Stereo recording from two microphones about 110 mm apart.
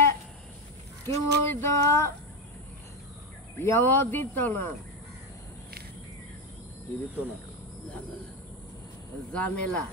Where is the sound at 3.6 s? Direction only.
20° left (ahead or behind).